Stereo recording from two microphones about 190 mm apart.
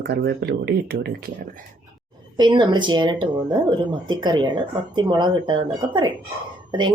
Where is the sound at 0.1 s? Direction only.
60° right (ahead or behind).